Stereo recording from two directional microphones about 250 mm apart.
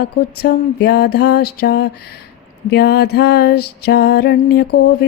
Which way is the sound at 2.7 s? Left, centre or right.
Left.